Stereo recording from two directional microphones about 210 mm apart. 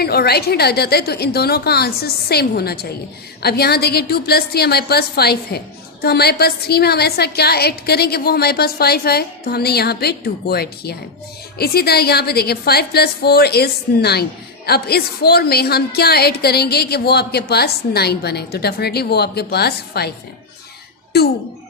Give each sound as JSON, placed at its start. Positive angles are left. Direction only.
{"t": 0.0, "sound": "a woman's voice", "side_deg": 50}